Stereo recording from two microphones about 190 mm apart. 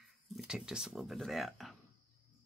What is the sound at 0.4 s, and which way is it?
Speech, 5° right (ahead or behind).